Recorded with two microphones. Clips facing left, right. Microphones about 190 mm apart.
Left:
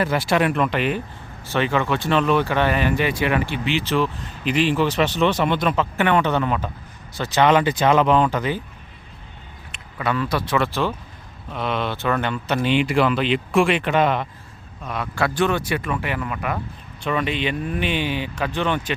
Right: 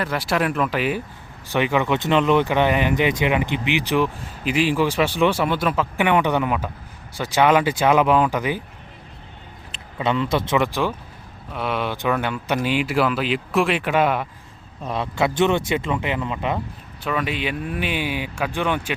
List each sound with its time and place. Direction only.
0.0 s speech: centre (ahead or behind)
9.7 s speech: 25° right (ahead or behind); by 14.3 s 5° right (ahead or behind)
14.8 s speech: 25° right (ahead or behind)
17.0 s speech: 5° right (ahead or behind)